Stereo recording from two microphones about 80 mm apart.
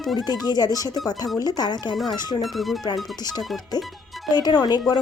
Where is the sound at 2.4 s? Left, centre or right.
Centre.